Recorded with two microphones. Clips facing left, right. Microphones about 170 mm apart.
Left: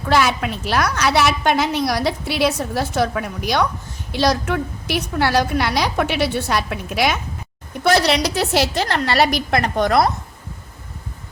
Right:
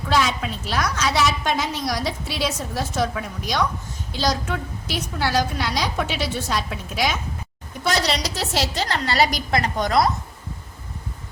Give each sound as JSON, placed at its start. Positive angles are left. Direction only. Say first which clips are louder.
{"t": 0.1, "sound": "a woman's voice", "louder": "left 4 dB", "side_deg": 65}